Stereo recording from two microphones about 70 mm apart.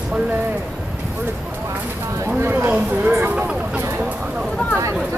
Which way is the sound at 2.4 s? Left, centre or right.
Right.